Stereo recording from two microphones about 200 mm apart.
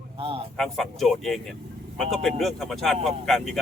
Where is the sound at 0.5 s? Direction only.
Centre (ahead or behind).